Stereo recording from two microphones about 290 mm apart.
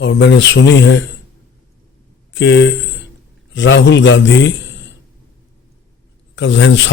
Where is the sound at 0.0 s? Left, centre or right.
Left.